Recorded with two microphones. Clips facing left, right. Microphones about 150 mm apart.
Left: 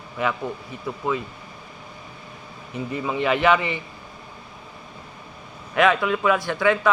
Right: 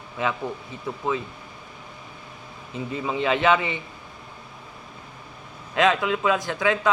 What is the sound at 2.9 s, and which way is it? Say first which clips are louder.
Speech: left 1 dB; 25° right (ahead or behind).